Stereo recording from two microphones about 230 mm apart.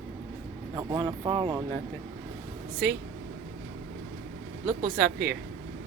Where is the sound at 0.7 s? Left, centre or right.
Centre.